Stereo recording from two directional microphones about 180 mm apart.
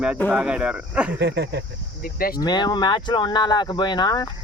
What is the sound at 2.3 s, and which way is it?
Speech, 25° left (ahead or behind).